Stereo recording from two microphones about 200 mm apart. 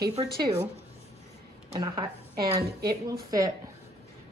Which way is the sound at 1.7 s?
20° right (ahead or behind).